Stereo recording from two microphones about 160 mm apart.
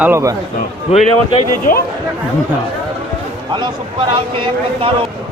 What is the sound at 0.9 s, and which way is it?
Speech, 40° left (ahead or behind).